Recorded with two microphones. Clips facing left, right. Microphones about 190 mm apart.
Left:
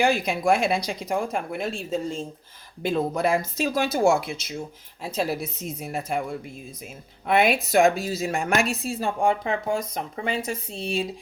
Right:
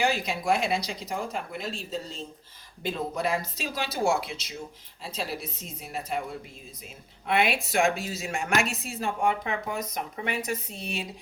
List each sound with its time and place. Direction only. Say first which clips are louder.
0.0 s speech: left 5 dB; 50° left (ahead or behind)
7.3 s speech: left 5 dB; 45° left (ahead or behind)